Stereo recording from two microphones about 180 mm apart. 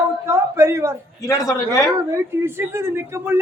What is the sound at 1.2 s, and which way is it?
Speech, 20° left (ahead or behind).